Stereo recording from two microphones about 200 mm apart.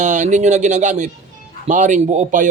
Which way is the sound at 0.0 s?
35° right (ahead or behind).